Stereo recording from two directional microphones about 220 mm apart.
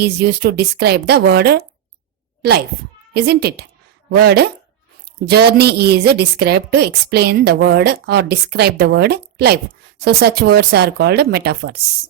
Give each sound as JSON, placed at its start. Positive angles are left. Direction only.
{"t": 0.0, "sound": "a woman's voice", "side_deg": -45}